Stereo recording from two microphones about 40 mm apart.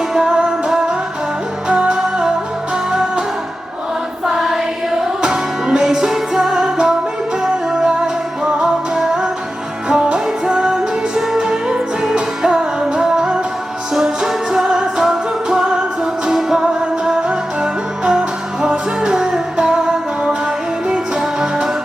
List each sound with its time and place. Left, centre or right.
0.1 s music: centre
4.4 s music: centre